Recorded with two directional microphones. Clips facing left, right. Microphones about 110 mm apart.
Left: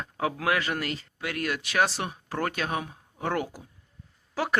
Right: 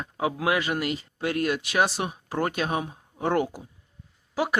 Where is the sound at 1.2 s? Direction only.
25° right (ahead or behind).